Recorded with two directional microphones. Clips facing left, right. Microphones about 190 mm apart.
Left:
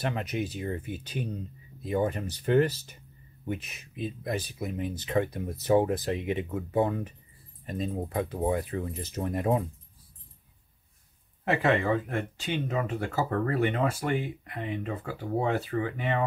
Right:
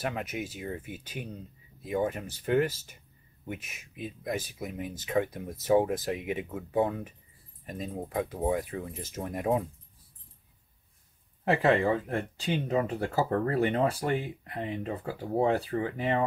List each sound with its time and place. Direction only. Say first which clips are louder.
0.0 s speech: left 3 dB; 5° right (ahead or behind)
11.4 s speech: right 1 dB; 35° right (ahead or behind)